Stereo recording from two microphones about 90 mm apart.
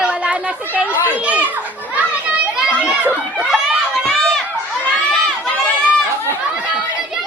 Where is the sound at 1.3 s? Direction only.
15° right (ahead or behind).